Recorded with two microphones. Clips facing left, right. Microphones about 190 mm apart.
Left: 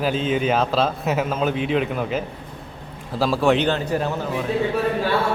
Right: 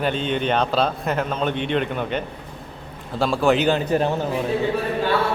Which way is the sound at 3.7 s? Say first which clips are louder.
Right 3 dB; 20° right (ahead or behind).